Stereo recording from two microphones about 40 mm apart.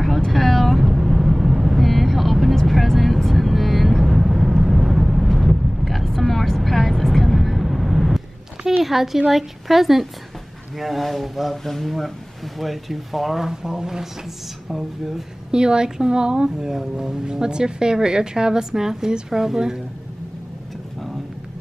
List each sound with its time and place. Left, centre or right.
0.3 s vehicle: centre
8.8 s a woman's voice: centre
15.5 s speech: centre